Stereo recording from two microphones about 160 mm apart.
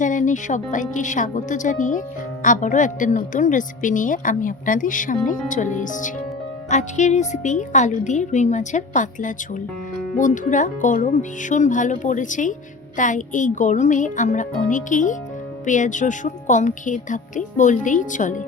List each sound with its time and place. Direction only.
0.0 s a woman's voice: 50° left (ahead or behind)